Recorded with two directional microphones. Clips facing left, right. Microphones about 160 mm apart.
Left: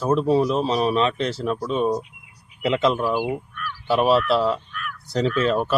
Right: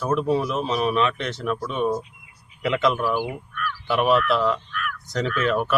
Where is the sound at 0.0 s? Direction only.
30° left (ahead or behind).